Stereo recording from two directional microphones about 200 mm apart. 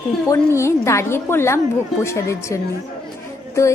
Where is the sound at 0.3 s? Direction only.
15° left (ahead or behind).